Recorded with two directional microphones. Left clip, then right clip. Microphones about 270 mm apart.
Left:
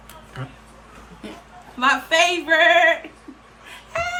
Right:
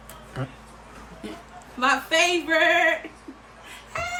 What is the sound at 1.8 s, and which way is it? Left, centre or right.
Speech, centre.